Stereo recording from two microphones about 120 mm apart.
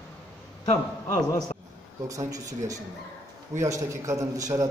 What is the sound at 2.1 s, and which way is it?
A man's voice, 25° right (ahead or behind).